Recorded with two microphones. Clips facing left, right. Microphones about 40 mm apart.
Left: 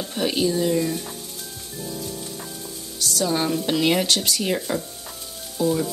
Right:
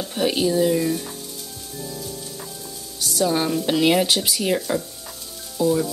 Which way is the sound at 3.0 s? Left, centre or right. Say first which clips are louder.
Right 2 dB; centre.